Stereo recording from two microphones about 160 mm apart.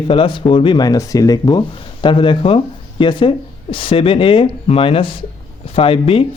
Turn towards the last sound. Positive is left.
turn(degrees=35)  # may be behind; listen again after turning